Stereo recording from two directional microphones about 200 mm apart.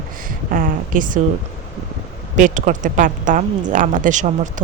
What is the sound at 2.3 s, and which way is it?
Speech, 40° right (ahead or behind).